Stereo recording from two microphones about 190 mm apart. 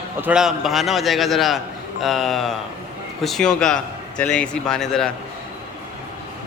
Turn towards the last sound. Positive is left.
turn(degrees=0)  # may be behind; listen again after turning